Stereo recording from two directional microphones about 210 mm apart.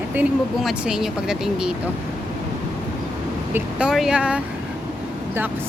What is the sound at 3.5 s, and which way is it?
A woman's voice, 5° right (ahead or behind).